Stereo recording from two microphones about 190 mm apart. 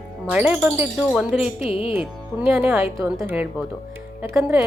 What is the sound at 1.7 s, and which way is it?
Speech, 30° left (ahead or behind).